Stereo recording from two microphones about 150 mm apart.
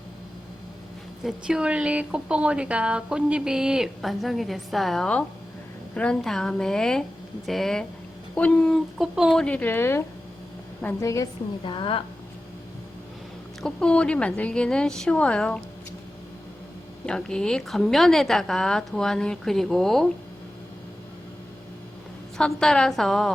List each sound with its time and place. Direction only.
1.2 s a woman's voice: 5° right (ahead or behind); by 10.0 s 15° left (ahead or behind)
11.0 s a woman's voice: 20° left (ahead or behind)
11.6 s a woman's voice: 35° left (ahead or behind)
13.6 s speech: 5° left (ahead or behind)
17.1 s a woman's voice: 5° left (ahead or behind)
22.4 s a woman's voice: 5° left (ahead or behind)